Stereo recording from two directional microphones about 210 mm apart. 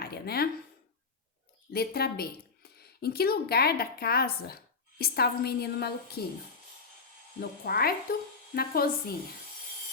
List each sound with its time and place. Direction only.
0.0 s speech: 50° left (ahead or behind)
1.7 s speech: 50° left (ahead or behind)
7.6 s speech: 45° left (ahead or behind)